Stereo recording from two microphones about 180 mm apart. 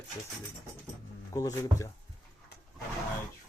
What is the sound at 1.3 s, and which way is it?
Speech, 20° left (ahead or behind).